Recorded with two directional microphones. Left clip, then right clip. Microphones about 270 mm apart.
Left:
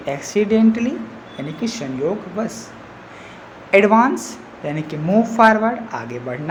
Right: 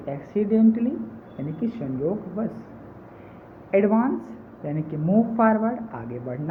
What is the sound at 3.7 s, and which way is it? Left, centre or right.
A woman's voice, centre.